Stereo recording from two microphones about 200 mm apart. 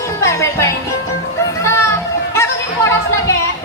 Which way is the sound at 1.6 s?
15° left (ahead or behind).